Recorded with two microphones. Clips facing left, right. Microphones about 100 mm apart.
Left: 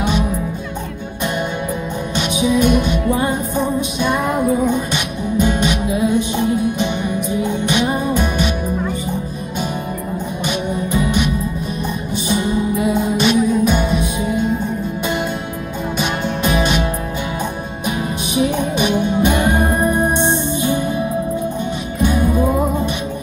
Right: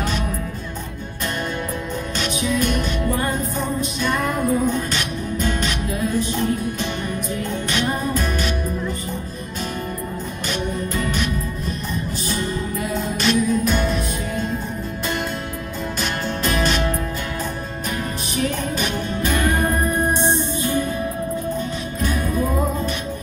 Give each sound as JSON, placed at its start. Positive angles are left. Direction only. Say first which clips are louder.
{"t": 0.0, "sound": "music", "louder": "left 6 dB", "side_deg": 10}
{"t": 2.1, "sound": "music", "louder": "left 6 dB", "side_deg": 10}
{"t": 10.7, "sound": "music", "louder": "left 6 dB", "side_deg": 15}
{"t": 16.0, "sound": "music", "louder": "left 5 dB", "side_deg": 10}
{"t": 17.8, "sound": "music", "louder": "left 7 dB", "side_deg": 10}